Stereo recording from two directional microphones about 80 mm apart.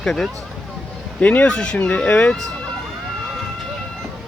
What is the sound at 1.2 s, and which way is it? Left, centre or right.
Speech, centre.